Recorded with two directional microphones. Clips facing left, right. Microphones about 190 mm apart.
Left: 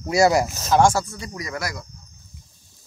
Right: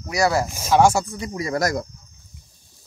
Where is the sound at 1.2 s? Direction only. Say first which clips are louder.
Right 6 dB; 20° right (ahead or behind).